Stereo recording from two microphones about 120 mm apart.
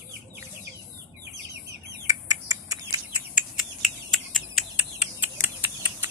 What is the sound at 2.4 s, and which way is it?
Bird, 25° right (ahead or behind).